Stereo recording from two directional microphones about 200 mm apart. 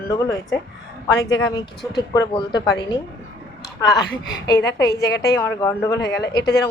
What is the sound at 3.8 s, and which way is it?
Speech, 20° left (ahead or behind).